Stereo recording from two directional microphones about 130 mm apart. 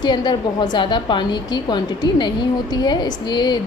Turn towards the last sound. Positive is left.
turn(degrees=35)  # may be behind; listen again after turning